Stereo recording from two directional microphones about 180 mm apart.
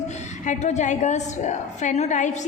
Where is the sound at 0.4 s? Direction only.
40° left (ahead or behind).